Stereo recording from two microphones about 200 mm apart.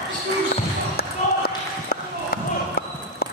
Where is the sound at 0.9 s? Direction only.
50° left (ahead or behind).